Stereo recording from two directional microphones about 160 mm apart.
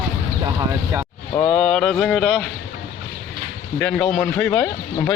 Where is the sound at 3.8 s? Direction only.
5° left (ahead or behind).